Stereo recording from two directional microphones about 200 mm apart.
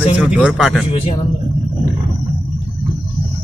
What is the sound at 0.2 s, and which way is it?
Speech, 5° right (ahead or behind).